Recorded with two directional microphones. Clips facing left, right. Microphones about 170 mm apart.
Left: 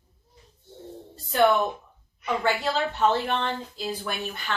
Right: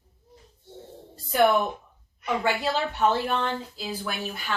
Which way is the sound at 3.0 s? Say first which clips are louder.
Even; 5° right (ahead or behind).